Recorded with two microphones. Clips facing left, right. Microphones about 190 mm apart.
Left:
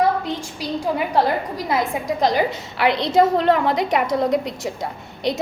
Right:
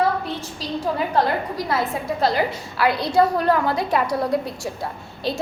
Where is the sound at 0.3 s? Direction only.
15° left (ahead or behind).